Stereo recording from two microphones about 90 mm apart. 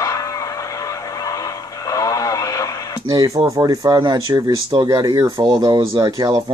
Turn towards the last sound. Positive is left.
turn(degrees=-40)  # may be behind; listen again after turning